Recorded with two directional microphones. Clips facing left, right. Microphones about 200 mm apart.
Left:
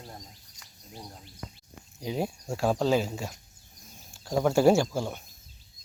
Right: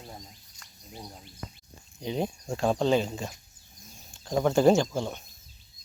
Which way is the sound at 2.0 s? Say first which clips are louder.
Right 1 dB; 5° left (ahead or behind).